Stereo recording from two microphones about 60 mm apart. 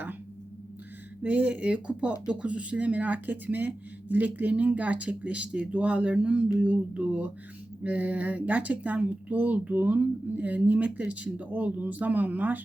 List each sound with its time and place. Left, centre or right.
1.2 s speech: right